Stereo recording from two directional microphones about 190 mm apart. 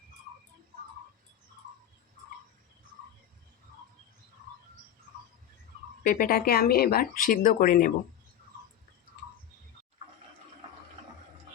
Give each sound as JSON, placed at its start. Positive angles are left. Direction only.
{"t": 6.0, "sound": "speech", "side_deg": 50}